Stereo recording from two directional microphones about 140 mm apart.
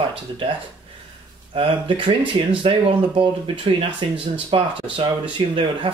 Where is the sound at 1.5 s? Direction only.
40° right (ahead or behind).